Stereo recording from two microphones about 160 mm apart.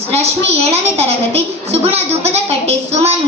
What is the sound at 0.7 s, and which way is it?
A woman's voice, 40° right (ahead or behind).